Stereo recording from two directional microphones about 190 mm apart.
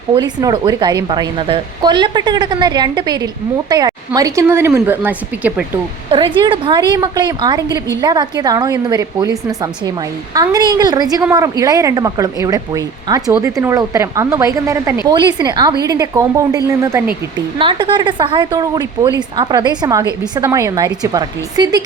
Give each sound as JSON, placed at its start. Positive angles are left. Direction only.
{"t": 0.1, "sound": "a woman's voice", "side_deg": -20}
{"t": 6.1, "sound": "a woman's voice", "side_deg": -25}
{"t": 17.6, "sound": "a woman's voice", "side_deg": -25}